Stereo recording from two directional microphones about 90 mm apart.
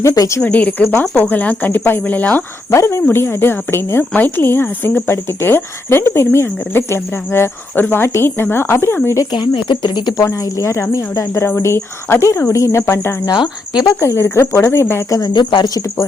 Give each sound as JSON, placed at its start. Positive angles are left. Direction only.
{"t": 0.0, "sound": "speech", "side_deg": 35}
{"t": 0.4, "sound": "speech", "side_deg": 20}
{"t": 2.6, "sound": "speech", "side_deg": 30}
{"t": 9.3, "sound": "speech", "side_deg": 60}
{"t": 10.4, "sound": "speech", "side_deg": 35}
{"t": 13.2, "sound": "speech", "side_deg": 50}
{"t": 14.0, "sound": "speech", "side_deg": 30}
{"t": 15.2, "sound": "speech", "side_deg": 60}